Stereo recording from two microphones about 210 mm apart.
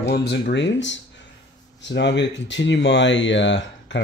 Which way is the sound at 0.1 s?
50° left (ahead or behind).